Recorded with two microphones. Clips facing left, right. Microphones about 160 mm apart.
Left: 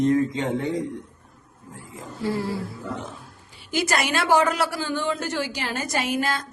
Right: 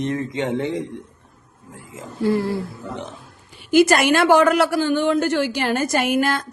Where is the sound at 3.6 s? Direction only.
60° right (ahead or behind).